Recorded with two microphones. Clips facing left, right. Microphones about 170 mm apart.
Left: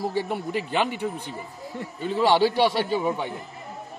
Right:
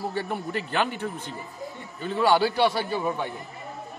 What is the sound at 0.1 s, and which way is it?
A man's voice, 15° left (ahead or behind).